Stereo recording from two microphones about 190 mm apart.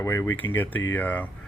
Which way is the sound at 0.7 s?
90° left.